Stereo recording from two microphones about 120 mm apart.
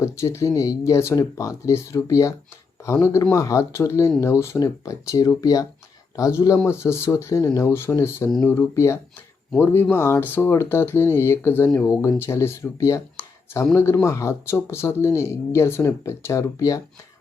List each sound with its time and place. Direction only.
0.0 s speech: 25° left (ahead or behind)